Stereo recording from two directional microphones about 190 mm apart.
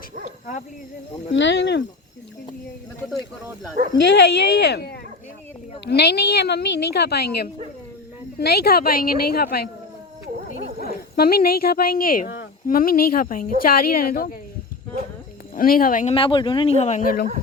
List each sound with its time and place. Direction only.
1.3 s speech: 70° left (ahead or behind)
4.0 s a woman's voice: 60° left (ahead or behind)
10.8 s speech: 55° left (ahead or behind)
15.5 s speech: 50° left (ahead or behind)
16.1 s speech: 25° left (ahead or behind); by 17.2 s 45° left (ahead or behind)